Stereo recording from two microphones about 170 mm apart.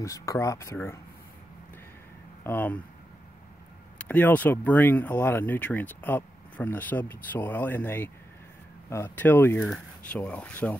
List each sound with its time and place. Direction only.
0.0 s speech: 20° left (ahead or behind)
2.4 s speech: 10° left (ahead or behind)
4.0 s speech: 10° left (ahead or behind)
9.6 s speech: centre (ahead or behind)